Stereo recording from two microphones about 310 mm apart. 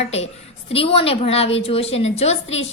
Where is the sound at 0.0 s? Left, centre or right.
Centre.